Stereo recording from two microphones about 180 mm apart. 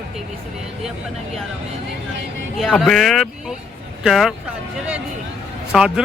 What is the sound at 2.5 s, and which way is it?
Speech, centre (ahead or behind).